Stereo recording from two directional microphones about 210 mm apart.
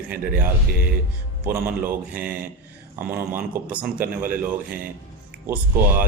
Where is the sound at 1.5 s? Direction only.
10° right (ahead or behind).